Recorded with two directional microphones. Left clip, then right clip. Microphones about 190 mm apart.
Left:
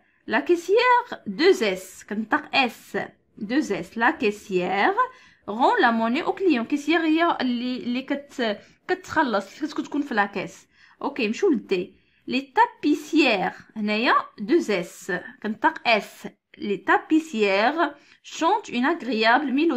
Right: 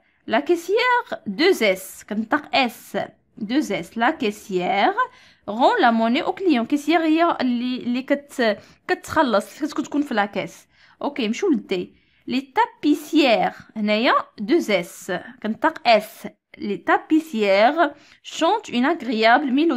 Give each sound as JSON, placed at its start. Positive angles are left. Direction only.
{"t": 0.3, "sound": "a woman's voice", "side_deg": -30}